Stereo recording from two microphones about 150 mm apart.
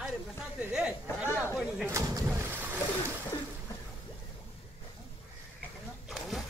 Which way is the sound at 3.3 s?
25° left (ahead or behind).